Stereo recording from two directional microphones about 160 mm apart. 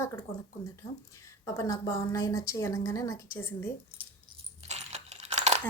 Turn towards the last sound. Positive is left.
turn(degrees=-45)  # may be behind; listen again after turning